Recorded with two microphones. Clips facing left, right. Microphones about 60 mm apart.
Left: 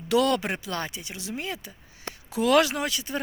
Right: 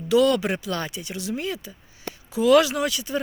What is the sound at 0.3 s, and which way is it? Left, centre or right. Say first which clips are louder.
A woman's voice: right 4 dB; left.